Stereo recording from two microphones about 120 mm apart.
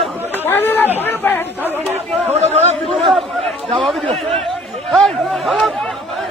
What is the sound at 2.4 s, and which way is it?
Chatter, 65° right (ahead or behind).